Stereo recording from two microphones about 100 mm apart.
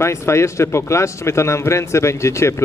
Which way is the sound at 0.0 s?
30° left (ahead or behind).